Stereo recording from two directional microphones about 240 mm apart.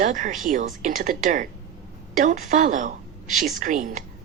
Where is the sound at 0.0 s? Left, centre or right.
Right.